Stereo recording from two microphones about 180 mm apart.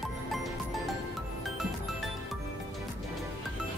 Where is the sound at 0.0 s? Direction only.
Centre (ahead or behind).